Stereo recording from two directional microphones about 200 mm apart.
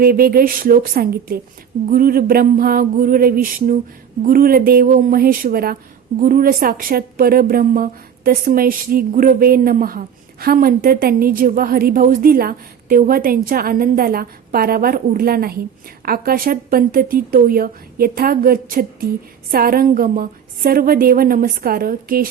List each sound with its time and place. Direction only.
0.0 s a woman's voice: 50° right (ahead or behind)